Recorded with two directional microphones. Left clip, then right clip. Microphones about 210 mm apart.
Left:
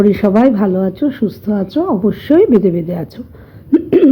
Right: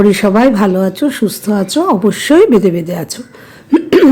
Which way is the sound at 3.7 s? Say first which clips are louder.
Right 2 dB; 15° right (ahead or behind).